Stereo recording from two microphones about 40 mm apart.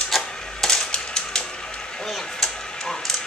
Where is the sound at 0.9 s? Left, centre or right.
Centre.